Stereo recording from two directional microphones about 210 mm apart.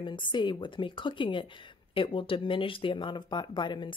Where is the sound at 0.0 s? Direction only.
25° left (ahead or behind).